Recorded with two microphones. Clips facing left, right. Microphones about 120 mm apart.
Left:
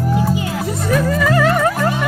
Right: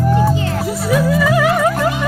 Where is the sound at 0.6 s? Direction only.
5° right (ahead or behind).